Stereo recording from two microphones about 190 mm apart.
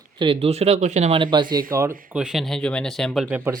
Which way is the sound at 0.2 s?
30° right (ahead or behind).